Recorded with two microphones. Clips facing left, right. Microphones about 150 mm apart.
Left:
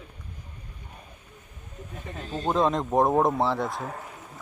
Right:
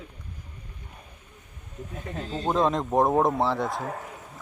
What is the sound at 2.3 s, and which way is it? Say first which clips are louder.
Speech: even; centre (ahead or behind).